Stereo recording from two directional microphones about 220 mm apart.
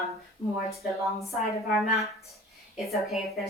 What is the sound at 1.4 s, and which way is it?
A woman's voice, centre (ahead or behind).